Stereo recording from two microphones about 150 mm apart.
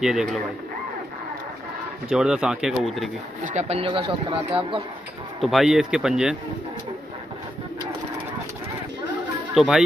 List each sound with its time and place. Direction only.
0.0 s speech: 5° right (ahead or behind)
2.0 s speech: 5° right (ahead or behind)
3.4 s speech: 50° right (ahead or behind)
5.4 s speech: centre (ahead or behind)
9.5 s speech: 5° right (ahead or behind)